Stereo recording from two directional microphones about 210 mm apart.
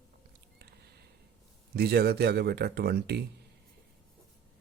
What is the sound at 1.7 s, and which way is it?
Speech, 50° right (ahead or behind).